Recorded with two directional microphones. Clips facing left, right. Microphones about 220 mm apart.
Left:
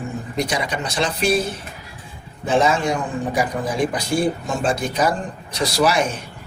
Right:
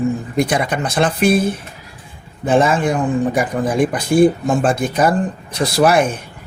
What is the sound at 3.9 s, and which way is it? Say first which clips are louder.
Speech: right 8 dB; 50° right (ahead or behind).